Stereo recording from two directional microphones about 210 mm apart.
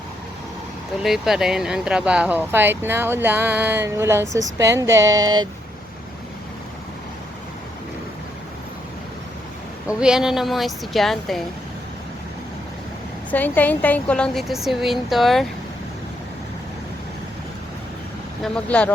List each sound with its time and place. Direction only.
1.0 s speech: centre (ahead or behind); by 5.5 s 20° right (ahead or behind)
10.0 s a woman's voice: 5° right (ahead or behind)
13.3 s a woman's voice: 10° left (ahead or behind)
18.4 s a woman's voice: 5° left (ahead or behind)